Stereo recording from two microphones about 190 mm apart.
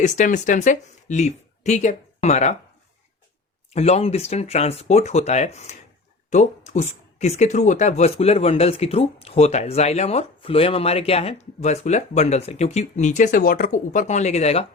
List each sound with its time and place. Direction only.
0.0 s speech: 40° left (ahead or behind)
3.8 s speech: 35° left (ahead or behind)